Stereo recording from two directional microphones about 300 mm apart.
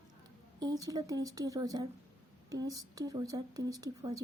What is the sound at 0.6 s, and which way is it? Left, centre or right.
Speech, centre.